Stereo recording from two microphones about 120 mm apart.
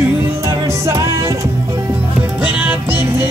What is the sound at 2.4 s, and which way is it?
Music, 15° right (ahead or behind).